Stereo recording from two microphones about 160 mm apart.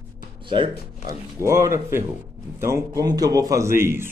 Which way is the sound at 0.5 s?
30° right (ahead or behind).